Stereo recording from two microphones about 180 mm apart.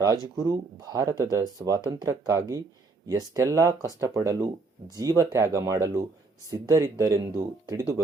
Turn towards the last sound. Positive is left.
turn(degrees=-15)  # may be behind; listen again after turning